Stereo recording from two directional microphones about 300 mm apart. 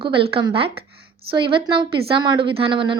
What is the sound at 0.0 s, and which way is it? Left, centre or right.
A woman's voice, centre.